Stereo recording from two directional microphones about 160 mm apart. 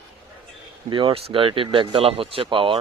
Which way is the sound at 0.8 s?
30° right (ahead or behind).